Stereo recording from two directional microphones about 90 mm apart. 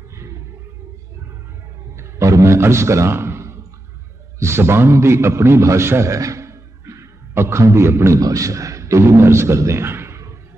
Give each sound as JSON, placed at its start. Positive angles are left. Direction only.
{"t": 0.1, "sound": "roaring cats", "side_deg": -30}
{"t": 2.0, "sound": "a sound", "side_deg": -35}
{"t": 4.4, "sound": "a man's voice", "side_deg": -30}